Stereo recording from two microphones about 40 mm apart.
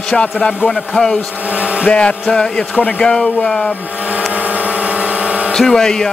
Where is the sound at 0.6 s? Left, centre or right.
Centre.